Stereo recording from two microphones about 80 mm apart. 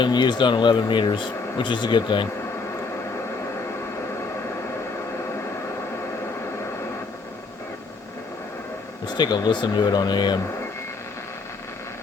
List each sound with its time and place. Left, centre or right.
0.0 s speech: left
9.0 s speech: left